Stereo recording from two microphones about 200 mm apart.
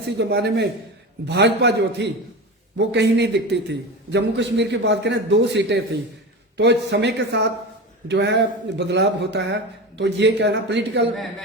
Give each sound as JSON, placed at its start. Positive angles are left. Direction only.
{"t": 0.2, "sound": "a man's voice", "side_deg": -55}
{"t": 11.1, "sound": "a man's voice", "side_deg": 0}